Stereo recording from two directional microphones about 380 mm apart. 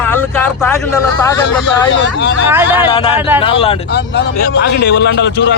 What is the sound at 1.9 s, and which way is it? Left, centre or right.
Speech, left.